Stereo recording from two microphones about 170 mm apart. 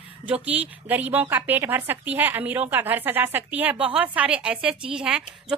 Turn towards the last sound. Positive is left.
turn(degrees=-5)  # may be behind; listen again after turning